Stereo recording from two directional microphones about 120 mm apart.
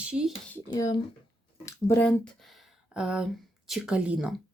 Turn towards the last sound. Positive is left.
turn(degrees=-10)  # may be behind; listen again after turning